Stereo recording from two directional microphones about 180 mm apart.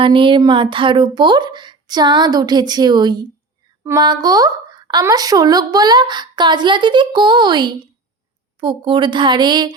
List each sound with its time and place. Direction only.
0.0 s a woman's voice: 30° right (ahead or behind)